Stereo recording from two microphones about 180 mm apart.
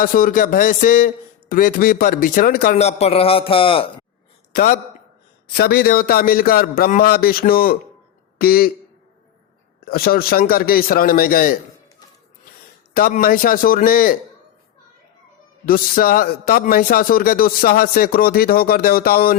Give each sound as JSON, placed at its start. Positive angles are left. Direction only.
{"t": 0.0, "sound": "a man's voice", "side_deg": 50}
{"t": 2.7, "sound": "a man's voice", "side_deg": 35}
{"t": 4.5, "sound": "a man's voice", "side_deg": 50}
{"t": 9.8, "sound": "a man's voice", "side_deg": 55}
{"t": 12.9, "sound": "a man's voice", "side_deg": 50}
{"t": 15.6, "sound": "a man's voice", "side_deg": 55}